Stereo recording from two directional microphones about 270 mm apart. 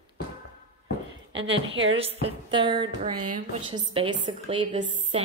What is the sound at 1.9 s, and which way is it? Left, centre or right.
A woman's voice, right.